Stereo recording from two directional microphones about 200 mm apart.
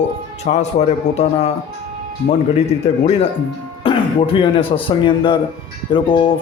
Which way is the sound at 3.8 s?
25° left (ahead or behind).